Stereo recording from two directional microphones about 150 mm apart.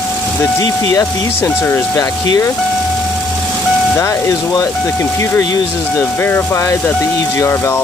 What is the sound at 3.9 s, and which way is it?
Speech, 20° left (ahead or behind).